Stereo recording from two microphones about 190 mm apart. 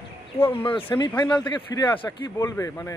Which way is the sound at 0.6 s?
25° left (ahead or behind).